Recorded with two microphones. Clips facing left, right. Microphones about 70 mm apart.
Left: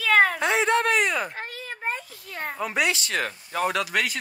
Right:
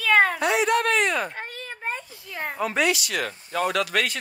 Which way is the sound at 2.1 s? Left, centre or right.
Centre.